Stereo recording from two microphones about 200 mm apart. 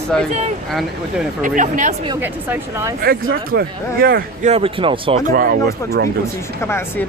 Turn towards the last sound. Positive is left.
turn(degrees=10)  # may be behind; listen again after turning